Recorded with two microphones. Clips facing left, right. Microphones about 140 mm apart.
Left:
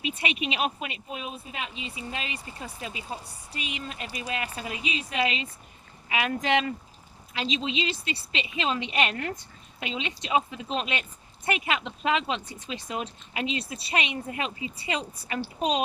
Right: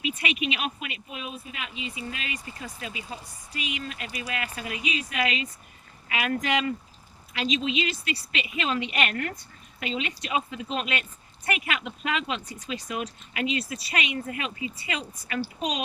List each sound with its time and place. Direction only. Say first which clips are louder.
0.0 s speech: right 1 dB; 35° left (ahead or behind)